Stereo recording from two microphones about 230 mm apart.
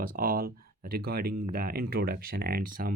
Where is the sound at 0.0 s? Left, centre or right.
Right.